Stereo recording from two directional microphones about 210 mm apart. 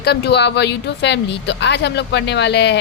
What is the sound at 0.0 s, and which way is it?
A woman's voice, 50° left (ahead or behind).